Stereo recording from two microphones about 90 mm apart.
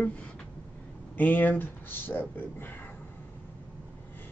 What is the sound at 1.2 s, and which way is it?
Speech, 20° left (ahead or behind).